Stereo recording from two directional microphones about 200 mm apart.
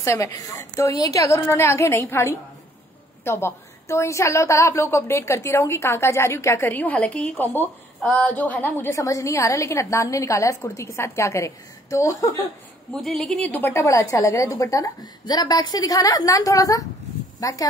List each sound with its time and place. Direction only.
0.0 s a woman's voice: 15° left (ahead or behind)
12.9 s a woman's voice: centre (ahead or behind); by 17.6 s 15° left (ahead or behind)